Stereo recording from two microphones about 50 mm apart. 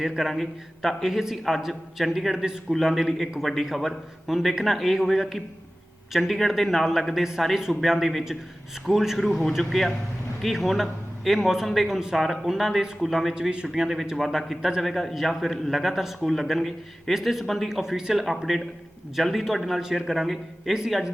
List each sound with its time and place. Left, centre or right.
0.0 s a man's voice: centre
17.7 s speech: centre